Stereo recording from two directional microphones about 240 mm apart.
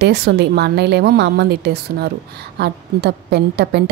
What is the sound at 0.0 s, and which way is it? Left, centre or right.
A woman's voice, right.